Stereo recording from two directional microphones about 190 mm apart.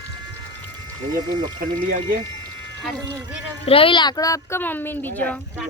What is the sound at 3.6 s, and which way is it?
Speech, 30° left (ahead or behind).